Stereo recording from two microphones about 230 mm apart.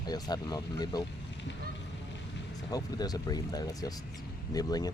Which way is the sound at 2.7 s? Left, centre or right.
Centre.